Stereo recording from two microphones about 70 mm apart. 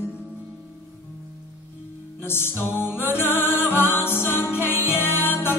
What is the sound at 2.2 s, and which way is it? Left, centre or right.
Music, left.